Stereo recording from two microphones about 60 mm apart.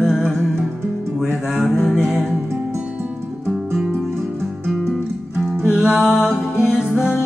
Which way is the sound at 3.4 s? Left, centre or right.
Centre.